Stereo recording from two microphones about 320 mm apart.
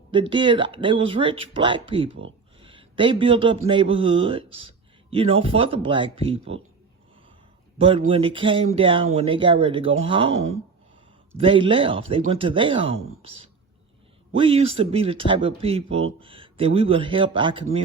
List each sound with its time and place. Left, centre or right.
0.1 s a man's voice: centre
7.8 s speech: centre